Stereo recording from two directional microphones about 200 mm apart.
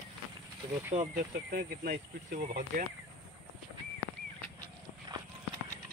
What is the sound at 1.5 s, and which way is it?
Speech, 45° right (ahead or behind).